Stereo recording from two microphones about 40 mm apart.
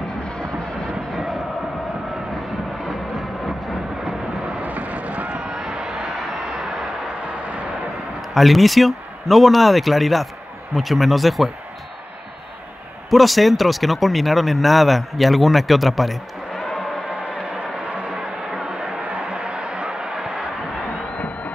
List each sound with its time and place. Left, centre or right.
1.1 s vehicle: centre
2.8 s music: centre
4.6 s vehicle: right
5.5 s a sound: centre
8.2 s speech: centre
13.1 s speech: centre
17.1 s a sound: right